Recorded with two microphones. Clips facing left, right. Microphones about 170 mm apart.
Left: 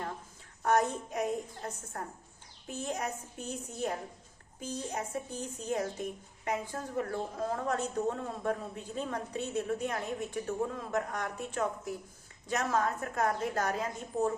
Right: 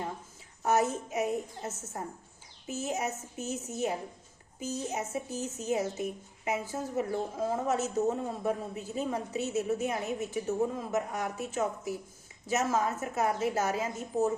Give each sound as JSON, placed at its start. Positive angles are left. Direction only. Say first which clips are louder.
{"t": 0.6, "sound": "a man's voice", "louder": "right 1 dB", "side_deg": -5}